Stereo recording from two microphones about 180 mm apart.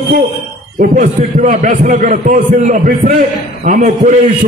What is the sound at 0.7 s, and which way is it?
A man's voice, 45° right (ahead or behind).